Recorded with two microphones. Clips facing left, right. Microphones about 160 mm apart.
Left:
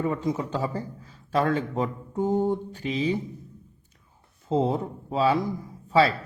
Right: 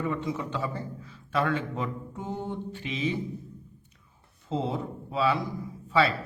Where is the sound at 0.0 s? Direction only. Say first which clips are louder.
Left 4 dB; 35° left (ahead or behind).